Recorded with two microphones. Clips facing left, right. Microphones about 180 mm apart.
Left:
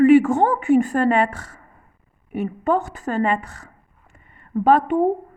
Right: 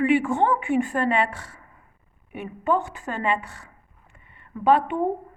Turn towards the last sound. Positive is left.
turn(degrees=40)  # may be behind; listen again after turning